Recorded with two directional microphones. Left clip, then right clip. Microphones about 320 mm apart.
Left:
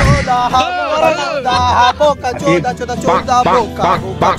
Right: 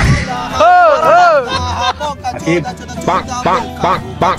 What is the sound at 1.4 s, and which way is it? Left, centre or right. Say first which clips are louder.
Music: left 6 dB; centre.